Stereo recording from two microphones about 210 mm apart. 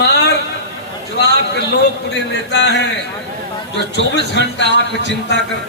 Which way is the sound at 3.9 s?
55° left (ahead or behind).